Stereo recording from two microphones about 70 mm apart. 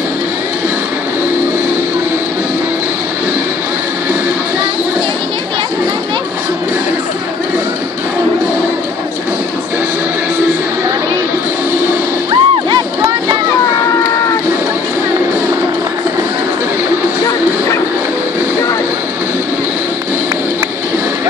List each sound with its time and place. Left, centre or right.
12.3 s music: right